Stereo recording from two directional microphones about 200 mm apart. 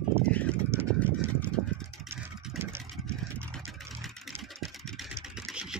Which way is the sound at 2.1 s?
10° right (ahead or behind).